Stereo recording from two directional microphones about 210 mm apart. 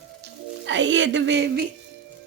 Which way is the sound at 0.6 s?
60° right (ahead or behind).